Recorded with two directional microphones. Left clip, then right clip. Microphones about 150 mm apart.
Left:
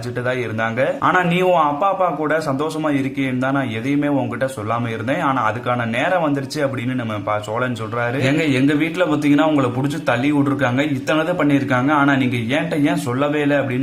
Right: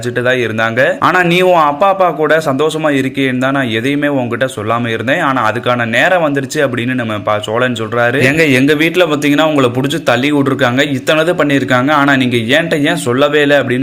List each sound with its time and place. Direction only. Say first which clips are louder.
0.3 s a man's voice: right 8 dB; 30° right (ahead or behind)